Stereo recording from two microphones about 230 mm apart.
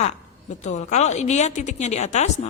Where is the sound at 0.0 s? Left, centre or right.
Left.